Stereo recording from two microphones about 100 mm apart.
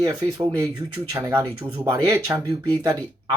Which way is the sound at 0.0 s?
40° right (ahead or behind).